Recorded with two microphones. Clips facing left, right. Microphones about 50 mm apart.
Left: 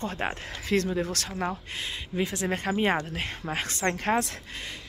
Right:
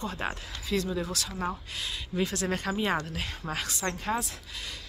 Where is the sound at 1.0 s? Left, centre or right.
Left.